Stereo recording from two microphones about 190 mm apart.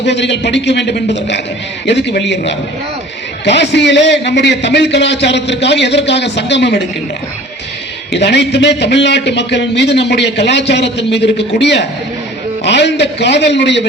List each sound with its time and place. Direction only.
0.0 s a man's voice: 65° left (ahead or behind)
3.4 s a man's voice: 65° left (ahead or behind)
8.1 s a man's voice: 65° left (ahead or behind)